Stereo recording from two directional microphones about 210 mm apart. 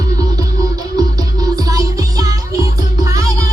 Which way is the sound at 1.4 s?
15° right (ahead or behind).